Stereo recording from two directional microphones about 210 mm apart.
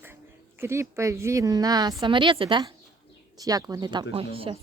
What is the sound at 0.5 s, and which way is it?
A woman's voice, 10° right (ahead or behind).